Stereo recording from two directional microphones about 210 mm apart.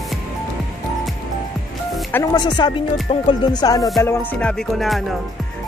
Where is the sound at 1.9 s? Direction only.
10° left (ahead or behind).